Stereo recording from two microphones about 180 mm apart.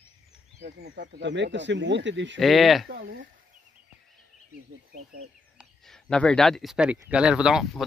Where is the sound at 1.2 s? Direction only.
80° right.